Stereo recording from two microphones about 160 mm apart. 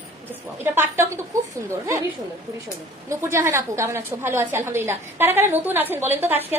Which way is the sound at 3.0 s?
20° right (ahead or behind).